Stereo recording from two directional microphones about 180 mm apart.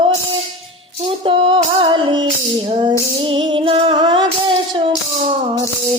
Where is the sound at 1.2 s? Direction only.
30° right (ahead or behind).